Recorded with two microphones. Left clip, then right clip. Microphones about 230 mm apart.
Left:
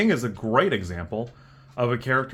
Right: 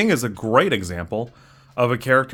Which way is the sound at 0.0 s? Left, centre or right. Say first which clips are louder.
Right 3 dB; right.